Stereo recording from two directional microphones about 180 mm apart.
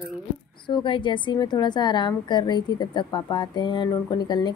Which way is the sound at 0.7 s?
25° left (ahead or behind).